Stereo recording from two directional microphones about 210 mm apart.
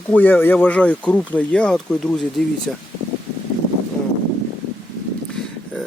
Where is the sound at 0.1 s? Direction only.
10° left (ahead or behind).